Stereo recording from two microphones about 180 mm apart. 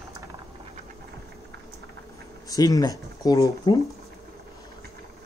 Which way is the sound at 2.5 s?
20° left (ahead or behind).